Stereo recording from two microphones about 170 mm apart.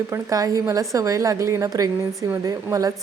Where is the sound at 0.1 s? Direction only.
20° right (ahead or behind).